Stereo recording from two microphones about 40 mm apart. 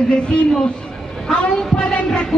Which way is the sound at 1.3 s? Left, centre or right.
Left.